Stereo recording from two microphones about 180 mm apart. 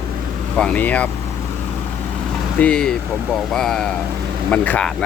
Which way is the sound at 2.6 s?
5° left (ahead or behind).